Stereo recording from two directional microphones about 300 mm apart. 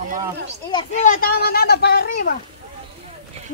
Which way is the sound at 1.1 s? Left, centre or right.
Left.